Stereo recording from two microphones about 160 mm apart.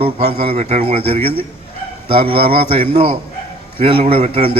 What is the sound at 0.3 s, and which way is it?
A man's voice, 40° right (ahead or behind).